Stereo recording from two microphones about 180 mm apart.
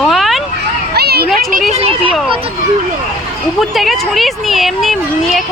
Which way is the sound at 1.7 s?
35° right (ahead or behind).